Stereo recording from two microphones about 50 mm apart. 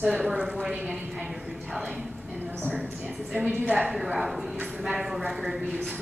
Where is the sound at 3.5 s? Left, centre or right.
Right.